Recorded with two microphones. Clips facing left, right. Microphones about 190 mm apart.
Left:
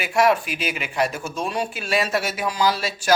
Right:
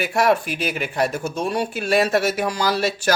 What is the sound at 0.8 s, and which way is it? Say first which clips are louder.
Speech: right 1 dB; 40° right (ahead or behind).